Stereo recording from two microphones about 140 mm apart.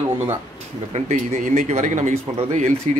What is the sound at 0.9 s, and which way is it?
Speech, 60° right (ahead or behind).